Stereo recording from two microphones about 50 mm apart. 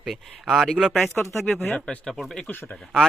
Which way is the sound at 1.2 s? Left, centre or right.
Left.